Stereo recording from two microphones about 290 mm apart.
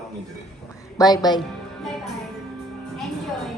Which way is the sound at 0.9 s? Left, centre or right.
Centre.